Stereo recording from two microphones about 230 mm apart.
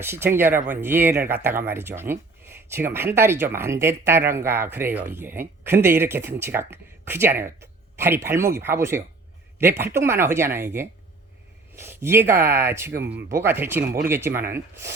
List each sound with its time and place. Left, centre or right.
0.0 s speech: centre